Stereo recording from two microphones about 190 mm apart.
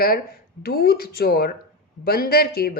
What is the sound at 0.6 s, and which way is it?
Speech, 50° left (ahead or behind).